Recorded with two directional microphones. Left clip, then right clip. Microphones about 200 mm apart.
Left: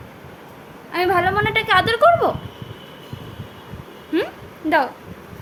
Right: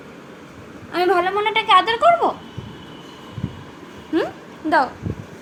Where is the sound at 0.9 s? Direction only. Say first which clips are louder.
Even; 5° left (ahead or behind).